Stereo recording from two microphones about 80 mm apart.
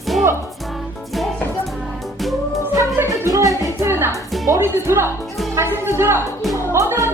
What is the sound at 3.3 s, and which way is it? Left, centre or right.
Music, right.